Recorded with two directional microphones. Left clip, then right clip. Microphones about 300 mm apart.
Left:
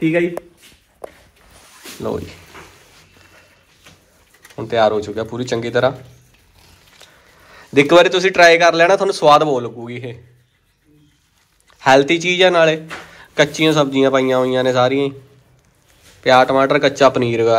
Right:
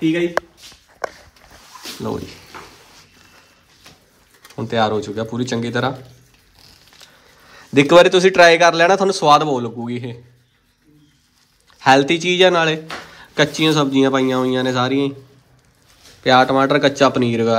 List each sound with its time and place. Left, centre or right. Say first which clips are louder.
2.0 s speech: left 3 dB; centre
4.6 s speech: left 3 dB; centre
7.4 s speech: left 1 dB; centre
11.8 s speech: left 1 dB; centre
16.2 s speech: left 1 dB; centre